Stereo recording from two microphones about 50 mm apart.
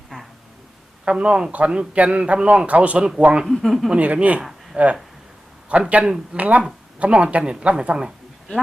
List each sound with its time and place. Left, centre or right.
0.1 s a sound: centre
1.0 s a man's voice: centre
3.4 s speech: centre
3.9 s a man's voice: right